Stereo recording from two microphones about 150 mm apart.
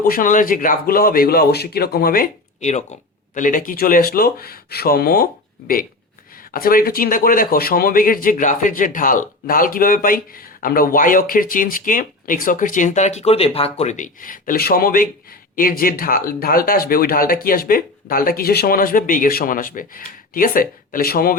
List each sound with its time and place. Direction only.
0.0 s speech: 70° left (ahead or behind); by 2.2 s 90° left
2.6 s speech: 50° left (ahead or behind)
3.3 s speech: 60° left (ahead or behind); by 21.3 s 80° left